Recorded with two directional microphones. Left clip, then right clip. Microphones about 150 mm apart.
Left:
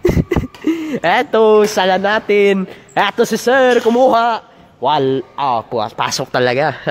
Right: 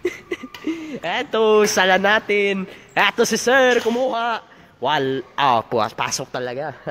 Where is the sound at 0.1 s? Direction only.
25° left (ahead or behind).